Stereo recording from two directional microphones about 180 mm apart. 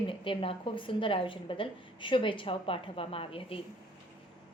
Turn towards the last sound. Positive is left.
turn(degrees=30)  # may be behind; listen again after turning